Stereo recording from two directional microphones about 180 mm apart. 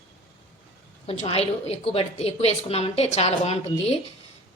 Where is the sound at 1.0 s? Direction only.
35° left (ahead or behind).